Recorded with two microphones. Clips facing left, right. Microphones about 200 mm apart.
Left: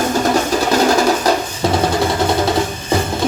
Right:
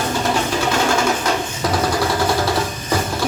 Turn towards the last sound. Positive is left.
turn(degrees=40)  # may be behind; listen again after turning